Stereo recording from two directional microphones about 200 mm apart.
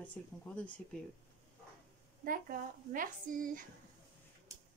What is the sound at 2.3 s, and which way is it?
A woman's voice, 45° right (ahead or behind).